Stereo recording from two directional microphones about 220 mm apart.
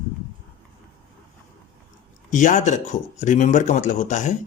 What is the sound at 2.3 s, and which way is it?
Speech, 35° left (ahead or behind).